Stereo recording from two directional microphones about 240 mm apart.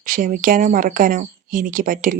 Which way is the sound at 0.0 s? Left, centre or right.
Right.